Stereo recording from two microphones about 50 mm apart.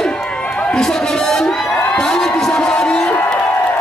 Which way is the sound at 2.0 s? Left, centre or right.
Centre.